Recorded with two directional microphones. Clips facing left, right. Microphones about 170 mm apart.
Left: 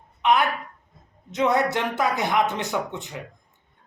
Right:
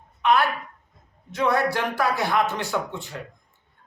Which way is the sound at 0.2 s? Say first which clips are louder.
Even; 20° left (ahead or behind).